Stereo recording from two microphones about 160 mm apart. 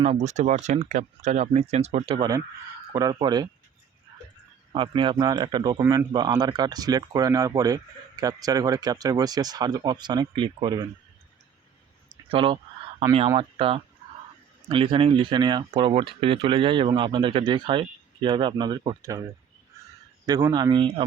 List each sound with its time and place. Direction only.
0.0 s speech: 45° right (ahead or behind); by 3.5 s 25° right (ahead or behind)
4.7 s speech: 30° right (ahead or behind)
5.8 s speech: 15° right (ahead or behind)
6.1 s speech: 25° right (ahead or behind)
12.3 s speech: 35° right (ahead or behind)
20.2 s speech: 25° right (ahead or behind)